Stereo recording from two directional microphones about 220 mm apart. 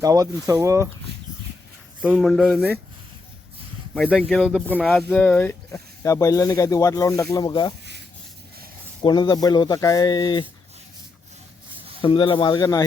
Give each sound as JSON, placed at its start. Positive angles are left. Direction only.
{"t": 0.0, "sound": "speech", "side_deg": -15}
{"t": 2.0, "sound": "speech", "side_deg": 0}
{"t": 3.9, "sound": "speech", "side_deg": 5}
{"t": 9.0, "sound": "speech", "side_deg": 20}
{"t": 12.0, "sound": "speech", "side_deg": 20}